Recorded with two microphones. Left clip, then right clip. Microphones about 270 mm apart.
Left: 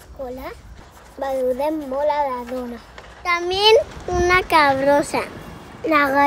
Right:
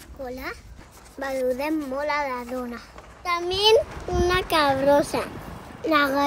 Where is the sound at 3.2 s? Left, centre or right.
Centre.